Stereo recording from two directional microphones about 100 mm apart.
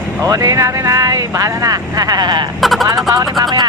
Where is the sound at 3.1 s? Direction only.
40° right (ahead or behind).